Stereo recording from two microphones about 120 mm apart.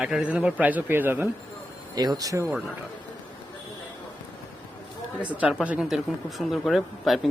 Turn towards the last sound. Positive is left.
turn(degrees=0)  # may be behind; listen again after turning